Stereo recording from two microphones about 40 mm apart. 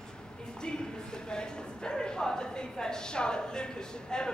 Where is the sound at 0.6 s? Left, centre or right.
Left.